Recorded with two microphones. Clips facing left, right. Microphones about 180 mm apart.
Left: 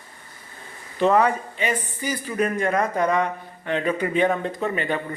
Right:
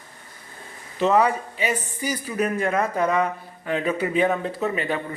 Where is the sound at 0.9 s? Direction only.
5° right (ahead or behind).